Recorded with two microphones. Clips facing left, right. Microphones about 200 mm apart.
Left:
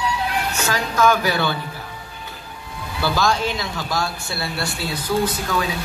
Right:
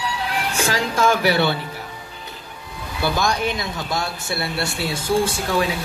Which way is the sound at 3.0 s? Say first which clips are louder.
Left 1 dB; 20° right (ahead or behind).